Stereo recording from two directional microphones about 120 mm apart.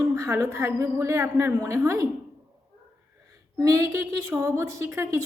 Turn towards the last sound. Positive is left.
turn(degrees=-25)  # may be behind; listen again after turning